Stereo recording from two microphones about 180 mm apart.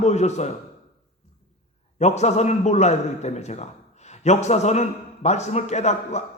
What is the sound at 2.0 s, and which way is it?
A man's voice, 40° left (ahead or behind).